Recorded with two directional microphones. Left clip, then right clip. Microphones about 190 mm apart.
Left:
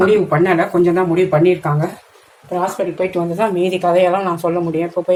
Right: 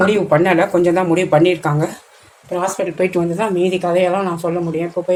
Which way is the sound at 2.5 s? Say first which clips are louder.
Left 1 dB; 20° right (ahead or behind).